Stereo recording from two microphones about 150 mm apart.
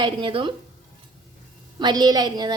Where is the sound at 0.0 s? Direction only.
35° right (ahead or behind).